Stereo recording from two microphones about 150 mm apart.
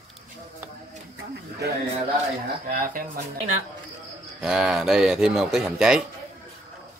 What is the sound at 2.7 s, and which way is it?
Speech, 65° right (ahead or behind).